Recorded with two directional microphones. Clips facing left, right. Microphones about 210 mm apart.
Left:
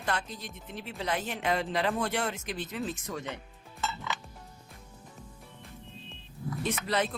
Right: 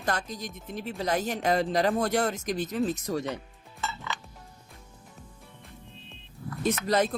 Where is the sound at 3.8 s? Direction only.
5° left (ahead or behind).